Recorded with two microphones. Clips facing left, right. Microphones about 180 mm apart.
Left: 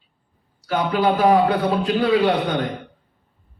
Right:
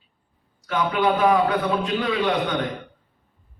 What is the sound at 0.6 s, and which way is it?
A man's voice, 35° left (ahead or behind).